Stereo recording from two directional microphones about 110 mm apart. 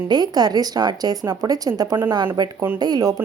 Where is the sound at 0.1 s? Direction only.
40° right (ahead or behind).